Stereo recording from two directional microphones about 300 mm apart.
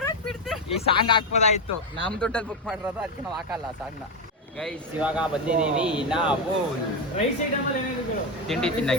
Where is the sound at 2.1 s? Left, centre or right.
Centre.